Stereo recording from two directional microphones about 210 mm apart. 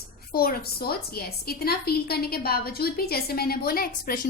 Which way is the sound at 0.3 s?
45° left (ahead or behind).